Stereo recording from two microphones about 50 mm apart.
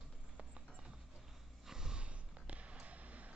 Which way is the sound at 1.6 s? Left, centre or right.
Centre.